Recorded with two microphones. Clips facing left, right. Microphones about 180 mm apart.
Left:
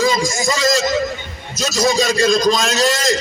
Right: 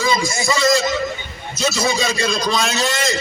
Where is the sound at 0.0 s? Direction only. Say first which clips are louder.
Left 3 dB; 40° left (ahead or behind).